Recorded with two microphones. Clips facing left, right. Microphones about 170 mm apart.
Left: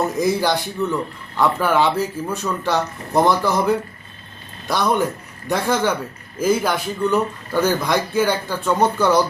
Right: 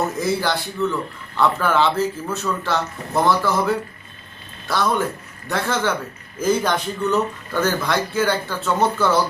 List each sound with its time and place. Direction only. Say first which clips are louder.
0.2 s speech: left 3 dB; 15° left (ahead or behind)